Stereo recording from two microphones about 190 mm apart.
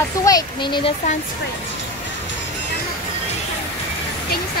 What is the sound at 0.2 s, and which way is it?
Speech, 20° left (ahead or behind).